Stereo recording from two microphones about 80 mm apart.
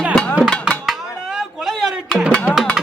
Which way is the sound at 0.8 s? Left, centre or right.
Centre.